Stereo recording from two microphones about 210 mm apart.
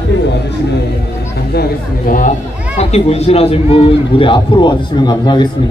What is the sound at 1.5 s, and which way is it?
Chatter, 50° left (ahead or behind).